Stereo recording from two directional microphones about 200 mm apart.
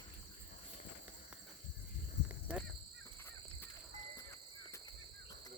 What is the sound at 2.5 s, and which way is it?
Speech, 5° right (ahead or behind).